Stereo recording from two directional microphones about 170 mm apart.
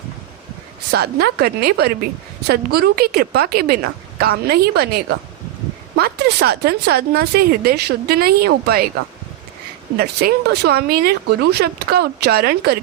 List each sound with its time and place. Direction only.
0.9 s a woman's voice: 70° right (ahead or behind)
6.0 s speech: 75° right (ahead or behind)
10.0 s speech: 70° right (ahead or behind)